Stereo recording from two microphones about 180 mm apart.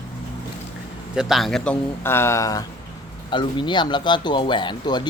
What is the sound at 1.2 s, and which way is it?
Speech, centre (ahead or behind).